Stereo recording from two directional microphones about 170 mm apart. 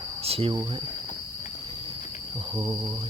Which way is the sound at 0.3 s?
35° right (ahead or behind).